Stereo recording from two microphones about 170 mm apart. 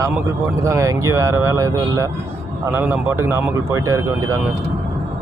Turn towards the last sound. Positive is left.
turn(degrees=-15)  # may be behind; listen again after turning